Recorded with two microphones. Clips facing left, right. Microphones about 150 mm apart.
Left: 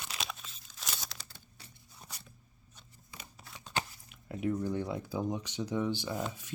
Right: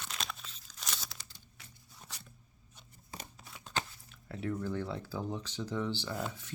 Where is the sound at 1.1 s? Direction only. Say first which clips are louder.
Left 2 dB; 90° left.